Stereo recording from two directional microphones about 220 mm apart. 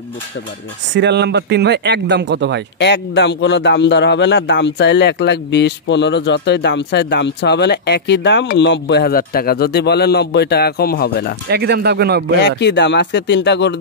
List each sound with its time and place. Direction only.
0.9 s speech: 50° right (ahead or behind)
2.8 s a man's voice: 50° left (ahead or behind)
11.4 s speech: 50° right (ahead or behind)
12.4 s a man's voice: 50° left (ahead or behind)